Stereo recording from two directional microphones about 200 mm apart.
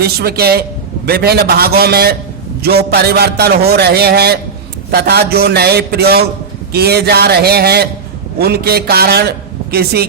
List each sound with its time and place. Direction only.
0.0 s a man's voice: 50° right (ahead or behind)